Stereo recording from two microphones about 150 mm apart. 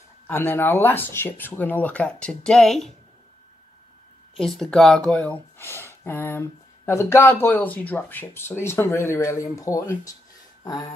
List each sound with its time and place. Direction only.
0.3 s speech: 15° left (ahead or behind)
4.4 s speech: 5° left (ahead or behind); by 10.1 s 20° left (ahead or behind)